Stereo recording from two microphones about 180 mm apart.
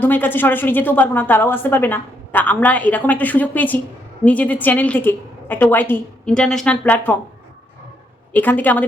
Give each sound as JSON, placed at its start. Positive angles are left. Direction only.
{"t": 0.0, "sound": "a woman's voice", "side_deg": 10}
{"t": 8.3, "sound": "a woman's voice", "side_deg": 10}